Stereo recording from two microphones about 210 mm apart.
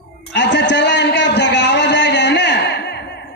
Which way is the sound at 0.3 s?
55° left (ahead or behind).